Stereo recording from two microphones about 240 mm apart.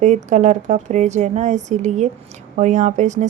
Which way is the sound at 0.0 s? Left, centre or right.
Right.